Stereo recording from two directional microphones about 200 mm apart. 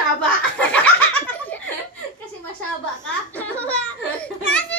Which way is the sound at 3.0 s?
10° left (ahead or behind).